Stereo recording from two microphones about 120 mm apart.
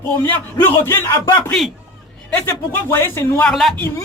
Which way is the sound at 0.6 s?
20° left (ahead or behind).